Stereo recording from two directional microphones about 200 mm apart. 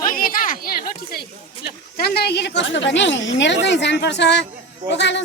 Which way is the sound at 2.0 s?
50° left (ahead or behind).